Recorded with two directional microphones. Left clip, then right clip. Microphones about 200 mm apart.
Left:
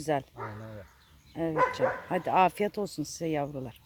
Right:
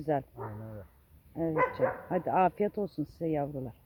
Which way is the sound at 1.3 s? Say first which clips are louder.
Left 2 dB; 15° left (ahead or behind).